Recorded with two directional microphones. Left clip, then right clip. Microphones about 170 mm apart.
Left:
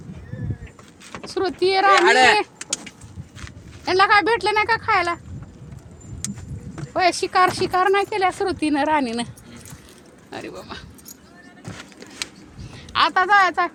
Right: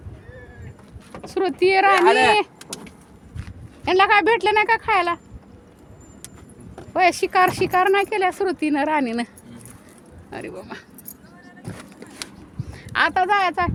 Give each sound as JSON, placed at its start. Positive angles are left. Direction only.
{"t": 1.3, "sound": "speech", "side_deg": -25}
{"t": 3.8, "sound": "speech", "side_deg": -20}
{"t": 6.9, "sound": "speech", "side_deg": -20}
{"t": 10.3, "sound": "speech", "side_deg": -15}
{"t": 12.9, "sound": "speech", "side_deg": -30}